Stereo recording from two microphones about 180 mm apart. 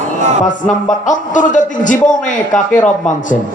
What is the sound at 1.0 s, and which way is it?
A man's voice, 45° left (ahead or behind).